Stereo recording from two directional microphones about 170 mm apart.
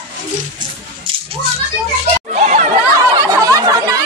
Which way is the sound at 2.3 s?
40° right (ahead or behind).